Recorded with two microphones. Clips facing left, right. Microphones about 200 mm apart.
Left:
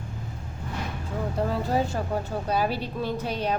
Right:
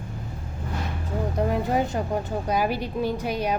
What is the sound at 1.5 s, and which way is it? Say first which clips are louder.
A woman's voice: right 2 dB; 15° right (ahead or behind).